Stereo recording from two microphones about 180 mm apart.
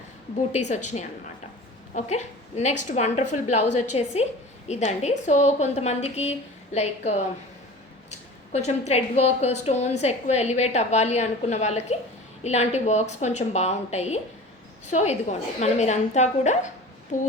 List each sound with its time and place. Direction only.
0.5 s a woman's voice: 40° left (ahead or behind)